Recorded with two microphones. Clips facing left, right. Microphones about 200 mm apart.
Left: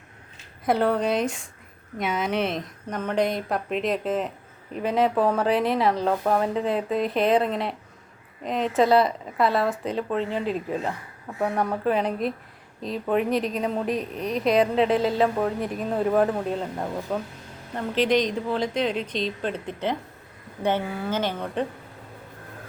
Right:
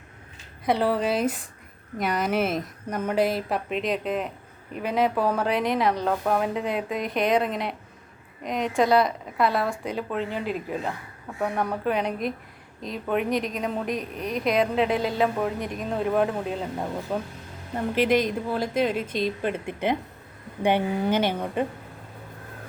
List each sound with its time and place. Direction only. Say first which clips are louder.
0.6 s speech: left 1 dB; centre (ahead or behind)
12.8 s a woman's voice: left 2 dB; 35° left (ahead or behind)
13.6 s speech: left 2 dB; centre (ahead or behind)
13.8 s a woman's voice: left 2 dB; 35° left (ahead or behind)
14.5 s a woman's voice: left 3 dB; centre (ahead or behind)